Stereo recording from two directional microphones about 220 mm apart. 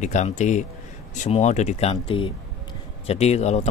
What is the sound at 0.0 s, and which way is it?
Speech, 35° left (ahead or behind).